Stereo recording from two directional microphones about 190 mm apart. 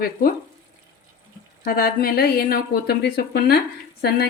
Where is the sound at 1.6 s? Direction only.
50° left (ahead or behind).